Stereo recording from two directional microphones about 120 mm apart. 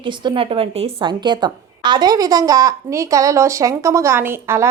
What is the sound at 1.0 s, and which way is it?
A woman's voice, 40° right (ahead or behind).